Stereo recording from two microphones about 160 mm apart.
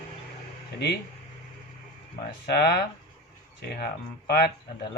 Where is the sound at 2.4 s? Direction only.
90° left.